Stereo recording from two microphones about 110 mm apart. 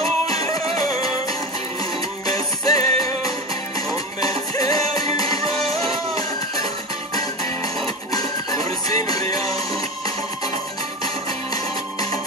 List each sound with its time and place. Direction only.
2.2 s music: 35° left (ahead or behind)
8.1 s music: 35° left (ahead or behind)